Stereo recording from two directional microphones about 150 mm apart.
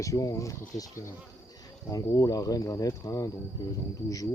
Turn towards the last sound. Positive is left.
turn(degrees=25)  # may be behind; listen again after turning